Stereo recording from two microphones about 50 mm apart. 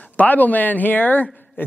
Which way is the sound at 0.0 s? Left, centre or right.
Left.